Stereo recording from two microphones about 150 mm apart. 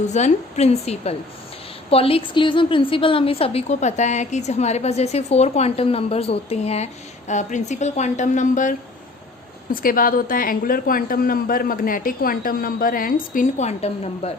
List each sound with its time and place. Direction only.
0.1 s a woman's voice: 50° left (ahead or behind)
9.7 s a woman's voice: 70° left (ahead or behind); by 14.3 s 45° left (ahead or behind)